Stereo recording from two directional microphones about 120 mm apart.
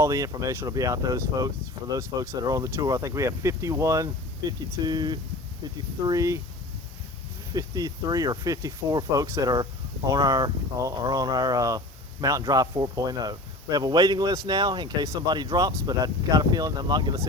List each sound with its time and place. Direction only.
0.0 s speech: 25° right (ahead or behind)
7.5 s speech: 30° right (ahead or behind)
9.2 s speech: 20° right (ahead or behind)
10.1 s speech: 30° right (ahead or behind)